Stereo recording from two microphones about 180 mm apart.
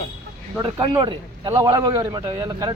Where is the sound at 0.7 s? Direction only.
25° right (ahead or behind).